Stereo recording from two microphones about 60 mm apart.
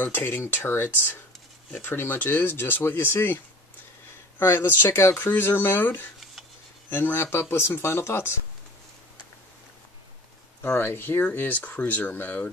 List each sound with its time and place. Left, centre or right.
0.0 s speech: left
10.6 s speech: left